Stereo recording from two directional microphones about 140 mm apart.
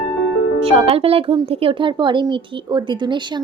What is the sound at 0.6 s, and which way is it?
Speech, 45° right (ahead or behind).